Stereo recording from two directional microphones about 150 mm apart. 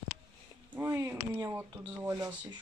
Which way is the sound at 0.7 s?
15° right (ahead or behind).